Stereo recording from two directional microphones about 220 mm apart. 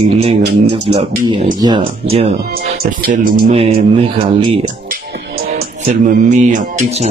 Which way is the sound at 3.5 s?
25° right (ahead or behind).